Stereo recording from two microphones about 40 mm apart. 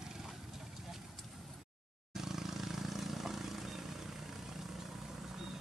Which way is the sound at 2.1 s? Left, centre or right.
Centre.